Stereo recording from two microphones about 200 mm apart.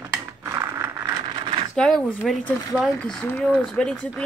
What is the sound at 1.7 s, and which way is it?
Speech, 5° left (ahead or behind).